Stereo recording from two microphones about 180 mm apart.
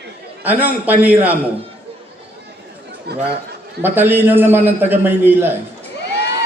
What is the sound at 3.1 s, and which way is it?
Speech, 65° right (ahead or behind).